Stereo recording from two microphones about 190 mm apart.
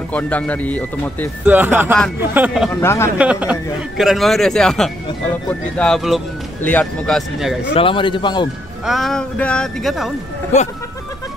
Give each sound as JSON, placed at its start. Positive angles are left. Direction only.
{"t": 0.1, "sound": "speech", "side_deg": 10}
{"t": 1.4, "sound": "speech", "side_deg": -10}
{"t": 2.8, "sound": "speech", "side_deg": 15}
{"t": 3.2, "sound": "speech", "side_deg": -5}
{"t": 7.7, "sound": "a man's voice", "side_deg": 25}
{"t": 8.8, "sound": "speech", "side_deg": 0}